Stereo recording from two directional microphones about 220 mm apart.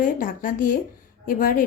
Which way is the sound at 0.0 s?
40° left (ahead or behind).